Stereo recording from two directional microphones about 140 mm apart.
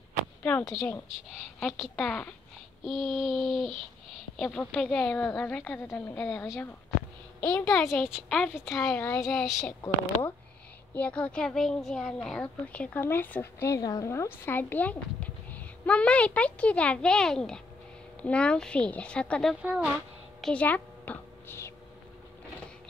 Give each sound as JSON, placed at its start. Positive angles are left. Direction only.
{"t": 0.4, "sound": "a woman's voice", "side_deg": 10}
{"t": 11.0, "sound": "a woman's voice", "side_deg": 10}
{"t": 19.6, "sound": "a sound", "side_deg": -5}